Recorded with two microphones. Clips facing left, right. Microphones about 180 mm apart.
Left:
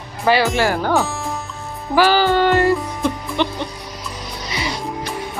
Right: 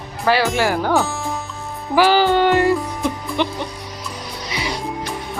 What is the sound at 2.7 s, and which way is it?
Music, centre (ahead or behind).